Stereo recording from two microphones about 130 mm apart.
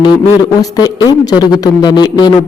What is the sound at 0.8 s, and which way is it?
A man's voice, 30° left (ahead or behind).